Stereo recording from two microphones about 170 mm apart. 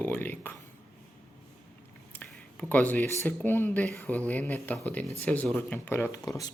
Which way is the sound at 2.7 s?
10° left (ahead or behind).